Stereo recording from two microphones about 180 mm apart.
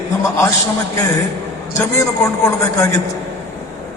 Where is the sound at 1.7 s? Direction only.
15° left (ahead or behind).